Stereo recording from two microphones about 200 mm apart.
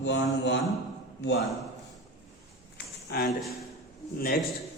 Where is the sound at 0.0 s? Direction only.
60° left (ahead or behind).